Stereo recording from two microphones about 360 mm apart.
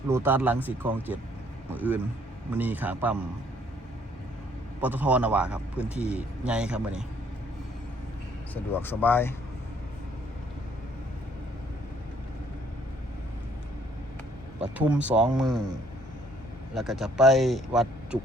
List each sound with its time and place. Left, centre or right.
0.1 s a man's voice: centre
4.8 s a man's voice: centre
8.7 s a man's voice: centre
14.6 s a man's voice: centre
16.7 s a man's voice: centre